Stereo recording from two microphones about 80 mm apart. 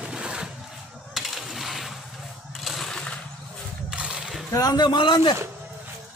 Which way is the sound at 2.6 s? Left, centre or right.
Centre.